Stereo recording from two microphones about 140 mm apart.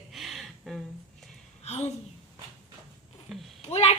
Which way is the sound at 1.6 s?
50° left (ahead or behind).